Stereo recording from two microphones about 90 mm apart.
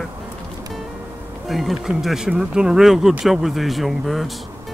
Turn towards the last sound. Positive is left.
turn(degrees=0)  # may be behind; listen again after turning